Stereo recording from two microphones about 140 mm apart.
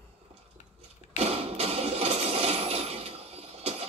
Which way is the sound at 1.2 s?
45° right (ahead or behind).